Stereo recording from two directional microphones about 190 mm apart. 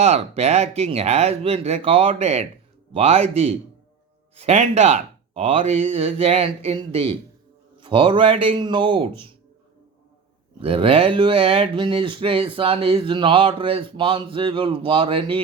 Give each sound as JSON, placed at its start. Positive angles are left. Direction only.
{"t": 0.0, "sound": "speech", "side_deg": -35}
{"t": 10.6, "sound": "speech", "side_deg": -30}